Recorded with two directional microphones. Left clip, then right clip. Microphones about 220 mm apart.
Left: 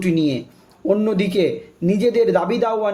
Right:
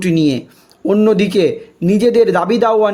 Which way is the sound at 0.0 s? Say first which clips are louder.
Right 5 dB; 45° right (ahead or behind).